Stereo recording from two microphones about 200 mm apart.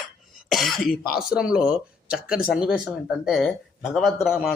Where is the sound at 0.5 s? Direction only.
Centre (ahead or behind).